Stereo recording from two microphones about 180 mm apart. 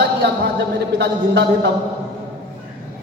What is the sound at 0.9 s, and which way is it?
Speech, 70° right (ahead or behind).